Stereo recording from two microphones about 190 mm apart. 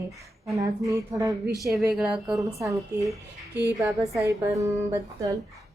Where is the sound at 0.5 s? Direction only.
15° right (ahead or behind).